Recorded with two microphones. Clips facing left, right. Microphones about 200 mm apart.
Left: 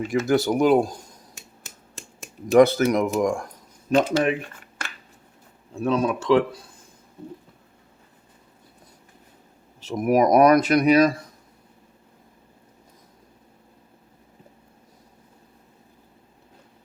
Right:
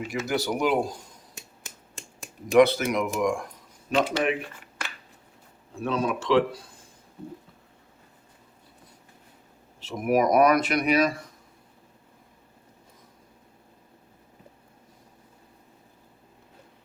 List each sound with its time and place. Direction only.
0.1 s speech: 50° left (ahead or behind)
2.5 s speech: 45° left (ahead or behind)
5.8 s speech: 45° left (ahead or behind)
9.8 s speech: 40° left (ahead or behind)